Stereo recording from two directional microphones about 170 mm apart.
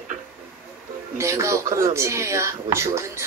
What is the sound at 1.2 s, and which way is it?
A woman's voice, 15° right (ahead or behind).